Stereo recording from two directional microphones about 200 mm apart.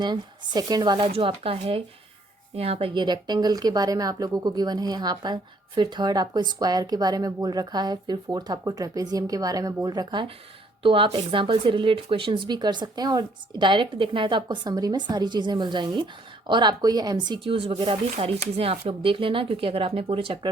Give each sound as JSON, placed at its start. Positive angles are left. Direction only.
{"t": 0.0, "sound": "speech", "side_deg": -20}